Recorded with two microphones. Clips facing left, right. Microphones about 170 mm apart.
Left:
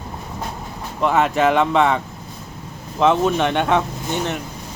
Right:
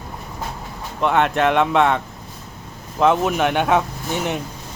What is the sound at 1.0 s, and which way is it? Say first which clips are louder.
Speech: left 1 dB; centre (ahead or behind).